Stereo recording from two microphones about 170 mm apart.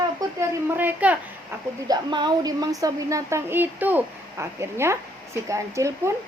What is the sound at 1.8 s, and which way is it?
A woman's voice, 25° right (ahead or behind).